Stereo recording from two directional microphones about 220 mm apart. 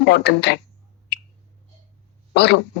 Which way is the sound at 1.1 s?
50° left (ahead or behind).